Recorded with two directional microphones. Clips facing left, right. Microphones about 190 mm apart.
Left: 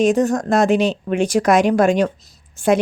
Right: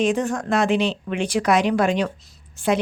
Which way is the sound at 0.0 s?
40° left (ahead or behind).